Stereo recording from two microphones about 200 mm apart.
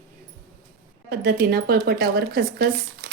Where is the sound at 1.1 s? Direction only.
55° right (ahead or behind).